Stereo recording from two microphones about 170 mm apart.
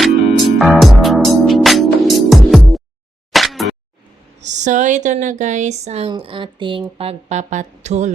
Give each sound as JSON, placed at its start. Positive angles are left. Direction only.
{"t": 0.0, "sound": "music", "side_deg": 0}
{"t": 3.3, "sound": "a sound", "side_deg": 0}
{"t": 4.4, "sound": "speech", "side_deg": -45}